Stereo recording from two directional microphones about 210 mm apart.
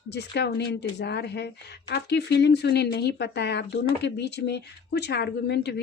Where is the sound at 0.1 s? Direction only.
55° left (ahead or behind).